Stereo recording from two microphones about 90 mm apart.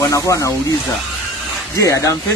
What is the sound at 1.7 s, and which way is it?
Speech, 35° left (ahead or behind).